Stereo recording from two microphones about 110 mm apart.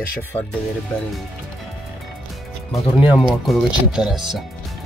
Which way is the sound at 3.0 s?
10° right (ahead or behind).